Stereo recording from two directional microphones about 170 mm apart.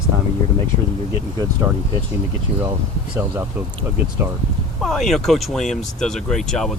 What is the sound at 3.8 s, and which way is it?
Speech, 10° right (ahead or behind).